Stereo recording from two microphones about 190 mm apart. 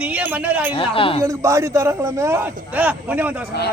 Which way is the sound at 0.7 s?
30° left (ahead or behind).